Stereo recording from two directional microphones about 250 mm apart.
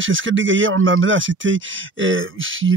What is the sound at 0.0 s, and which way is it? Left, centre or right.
Speech, right.